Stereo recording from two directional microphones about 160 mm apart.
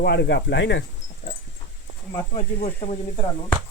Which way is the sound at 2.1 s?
35° left (ahead or behind).